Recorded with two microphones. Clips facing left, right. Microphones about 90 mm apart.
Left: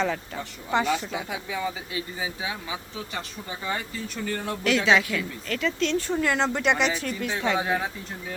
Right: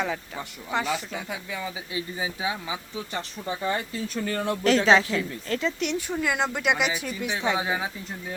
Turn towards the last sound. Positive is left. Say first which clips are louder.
# left 2 dB
turn(degrees=-5)  # may be behind; listen again after turning